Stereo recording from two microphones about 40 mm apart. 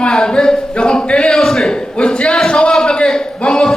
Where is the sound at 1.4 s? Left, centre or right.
Centre.